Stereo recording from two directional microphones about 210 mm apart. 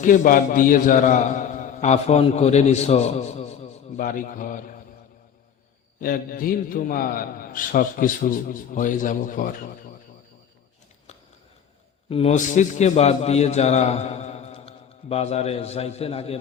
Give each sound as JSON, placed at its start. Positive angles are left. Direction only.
{"t": 0.0, "sound": "a man's voice", "side_deg": 40}
{"t": 6.0, "sound": "a man's voice", "side_deg": 45}
{"t": 12.0, "sound": "a man's voice", "side_deg": 30}